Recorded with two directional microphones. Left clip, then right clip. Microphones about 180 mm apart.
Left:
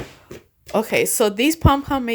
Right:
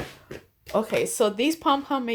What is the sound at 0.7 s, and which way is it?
A woman's voice, 45° left (ahead or behind).